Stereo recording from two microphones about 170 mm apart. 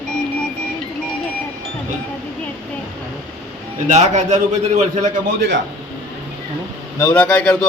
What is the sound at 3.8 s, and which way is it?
A man's voice, 40° right (ahead or behind).